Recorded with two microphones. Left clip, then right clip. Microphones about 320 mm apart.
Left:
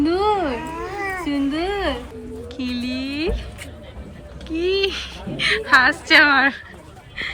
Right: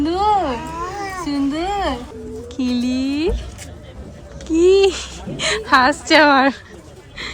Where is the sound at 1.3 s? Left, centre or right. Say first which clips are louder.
Right 4 dB; centre.